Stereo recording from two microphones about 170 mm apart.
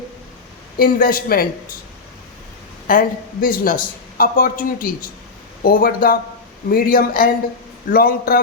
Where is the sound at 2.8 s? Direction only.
55° left (ahead or behind).